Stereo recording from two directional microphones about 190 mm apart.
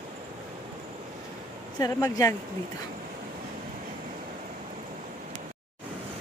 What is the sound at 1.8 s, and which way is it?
Speech, 15° left (ahead or behind).